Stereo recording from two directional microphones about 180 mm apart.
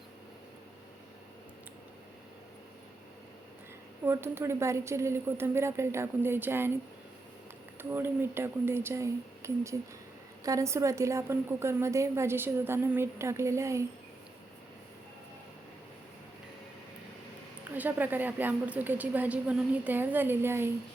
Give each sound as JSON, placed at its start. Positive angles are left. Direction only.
{"t": 4.0, "sound": "a woman's voice", "side_deg": -15}
{"t": 7.8, "sound": "a woman's voice", "side_deg": -10}
{"t": 17.7, "sound": "a woman's voice", "side_deg": -10}